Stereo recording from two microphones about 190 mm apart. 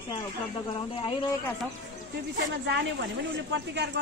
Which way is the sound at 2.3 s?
65° right (ahead or behind).